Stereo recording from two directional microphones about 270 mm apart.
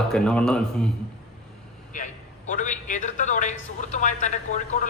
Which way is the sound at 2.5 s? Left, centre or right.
Left.